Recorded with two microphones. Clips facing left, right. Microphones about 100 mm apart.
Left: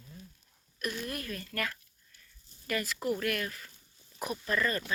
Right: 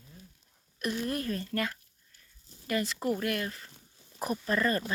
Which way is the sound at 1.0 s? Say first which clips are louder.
Right 6 dB; 30° right (ahead or behind).